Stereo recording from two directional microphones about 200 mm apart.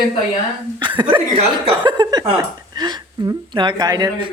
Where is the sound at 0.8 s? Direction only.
25° right (ahead or behind).